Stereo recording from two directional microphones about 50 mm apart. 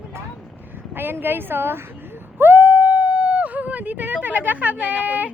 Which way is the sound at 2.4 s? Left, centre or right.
Right.